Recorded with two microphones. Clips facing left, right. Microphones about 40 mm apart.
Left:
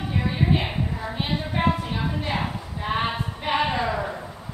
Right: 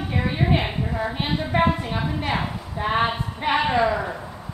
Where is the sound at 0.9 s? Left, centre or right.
Right; by 4.2 s centre.